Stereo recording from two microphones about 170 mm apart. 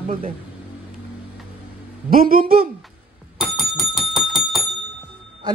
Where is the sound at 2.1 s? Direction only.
55° right (ahead or behind).